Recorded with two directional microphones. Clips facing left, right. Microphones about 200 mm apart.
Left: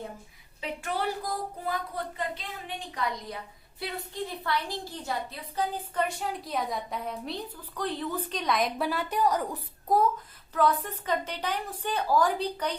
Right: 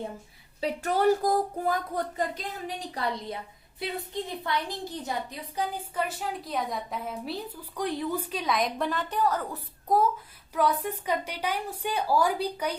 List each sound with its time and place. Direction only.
0.6 s a sound: 40° right (ahead or behind)
4.3 s a woman's voice: 20° right (ahead or behind); by 9.6 s 15° left (ahead or behind)
9.9 s a woman's voice: centre (ahead or behind)
10.5 s a woman's voice: 10° right (ahead or behind)